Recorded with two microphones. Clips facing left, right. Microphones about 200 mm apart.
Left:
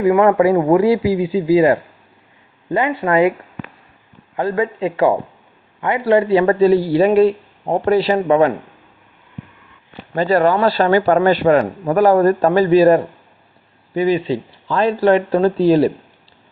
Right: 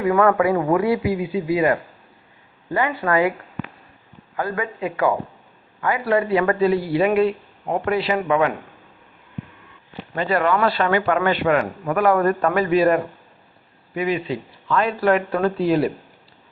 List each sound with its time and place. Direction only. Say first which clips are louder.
0.0 s speech: left 5 dB; 25° left (ahead or behind)
4.4 s speech: left 6 dB; 25° left (ahead or behind)
10.2 s speech: left 5 dB; 35° left (ahead or behind)